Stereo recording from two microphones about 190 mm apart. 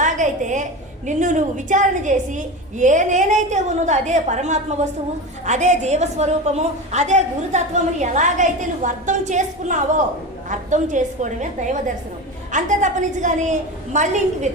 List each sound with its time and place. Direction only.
0.0 s a woman's voice: 40° right (ahead or behind)